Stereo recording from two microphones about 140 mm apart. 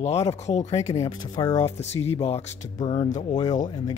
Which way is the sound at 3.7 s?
25° left (ahead or behind).